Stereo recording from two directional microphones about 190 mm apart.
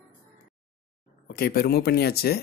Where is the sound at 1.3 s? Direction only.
55° left (ahead or behind).